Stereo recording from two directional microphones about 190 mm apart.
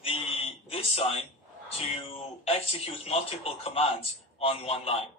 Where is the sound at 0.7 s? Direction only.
30° left (ahead or behind).